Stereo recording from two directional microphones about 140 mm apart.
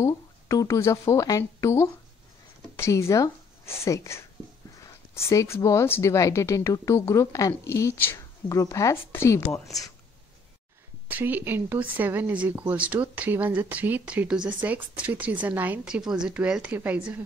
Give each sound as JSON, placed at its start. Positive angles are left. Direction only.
{"t": 0.0, "sound": "speech", "side_deg": 20}
{"t": 11.1, "sound": "a woman's voice", "side_deg": -15}